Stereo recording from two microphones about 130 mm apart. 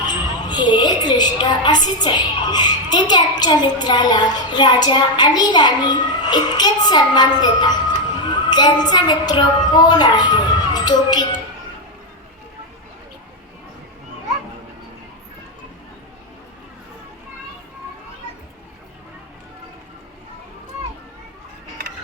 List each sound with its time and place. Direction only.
0.1 s a woman's voice: 35° left (ahead or behind)